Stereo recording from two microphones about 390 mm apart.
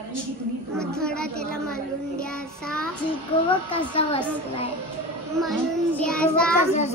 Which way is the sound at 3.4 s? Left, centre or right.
Centre.